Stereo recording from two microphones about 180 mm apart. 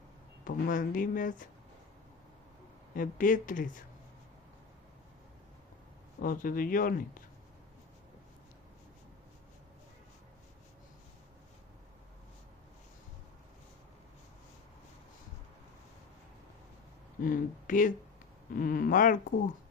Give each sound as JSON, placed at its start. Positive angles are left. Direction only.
{"t": 0.4, "sound": "speech", "side_deg": 50}
{"t": 2.9, "sound": "speech", "side_deg": 50}
{"t": 6.2, "sound": "speech", "side_deg": 50}
{"t": 17.2, "sound": "speech", "side_deg": 50}